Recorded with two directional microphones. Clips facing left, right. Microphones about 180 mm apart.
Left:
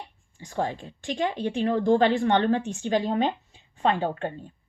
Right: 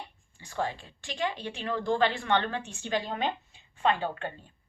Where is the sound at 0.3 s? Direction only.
45° left (ahead or behind).